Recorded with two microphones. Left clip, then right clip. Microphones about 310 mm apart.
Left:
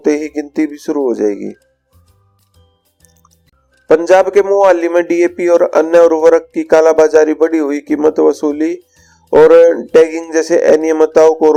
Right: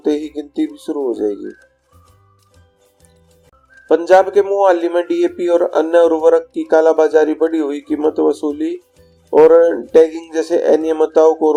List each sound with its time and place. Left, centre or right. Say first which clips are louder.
0.3 s a sound: left 4 dB; left
0.9 s speech: left 5 dB; left
3.8 s speech: left 2 dB; left